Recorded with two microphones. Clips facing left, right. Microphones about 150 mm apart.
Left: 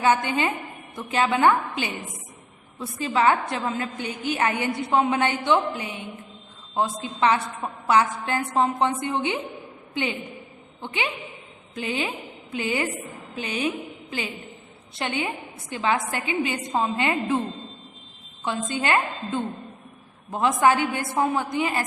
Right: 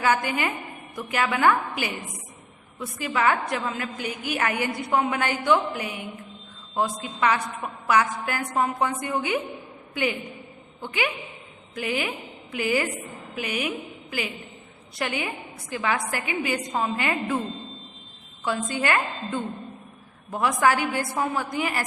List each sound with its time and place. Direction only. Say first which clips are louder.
0.0 s a woman's voice: left 2 dB; 25° left (ahead or behind)
18.4 s a woman's voice: even; 25° left (ahead or behind)